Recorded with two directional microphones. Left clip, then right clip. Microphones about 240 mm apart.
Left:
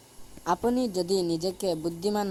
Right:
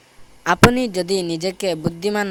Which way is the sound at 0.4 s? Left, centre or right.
Right.